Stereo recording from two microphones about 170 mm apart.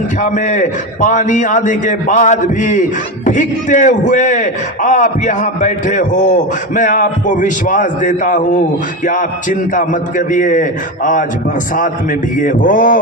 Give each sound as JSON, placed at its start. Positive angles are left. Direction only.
{"t": 0.2, "sound": "a man's voice", "side_deg": 45}
{"t": 12.4, "sound": "a man's voice", "side_deg": 50}